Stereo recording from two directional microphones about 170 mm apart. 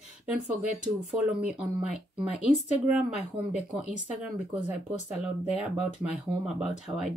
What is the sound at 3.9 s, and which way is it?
Speech, 5° right (ahead or behind).